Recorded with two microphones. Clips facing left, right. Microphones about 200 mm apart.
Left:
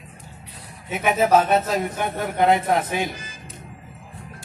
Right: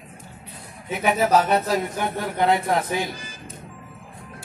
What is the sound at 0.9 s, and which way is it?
A man's voice, 20° left (ahead or behind).